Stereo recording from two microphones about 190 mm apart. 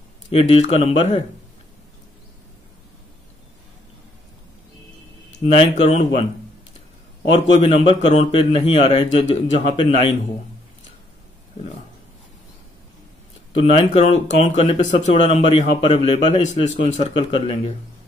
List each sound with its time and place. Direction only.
0.3 s speech: 30° left (ahead or behind)
5.4 s speech: 30° left (ahead or behind)
7.3 s speech: 30° left (ahead or behind)
13.5 s speech: 35° left (ahead or behind)